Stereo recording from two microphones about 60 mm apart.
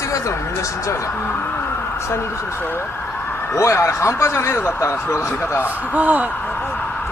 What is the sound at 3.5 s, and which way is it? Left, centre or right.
Speech, left.